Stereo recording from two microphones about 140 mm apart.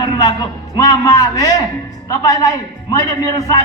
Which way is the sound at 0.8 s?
25° left (ahead or behind).